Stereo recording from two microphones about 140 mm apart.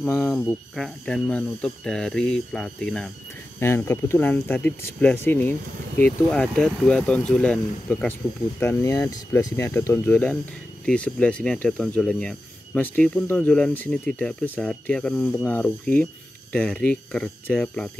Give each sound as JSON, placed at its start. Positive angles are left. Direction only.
{"t": 0.0, "sound": "speech", "side_deg": 10}
{"t": 3.5, "sound": "speech", "side_deg": 20}
{"t": 8.5, "sound": "speech", "side_deg": 20}